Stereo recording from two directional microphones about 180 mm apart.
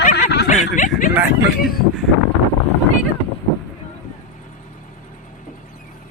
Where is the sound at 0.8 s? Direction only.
45° left (ahead or behind).